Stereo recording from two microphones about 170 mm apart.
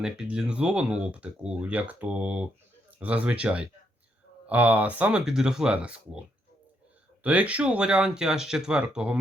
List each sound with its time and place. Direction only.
0.0 s speech: 5° right (ahead or behind)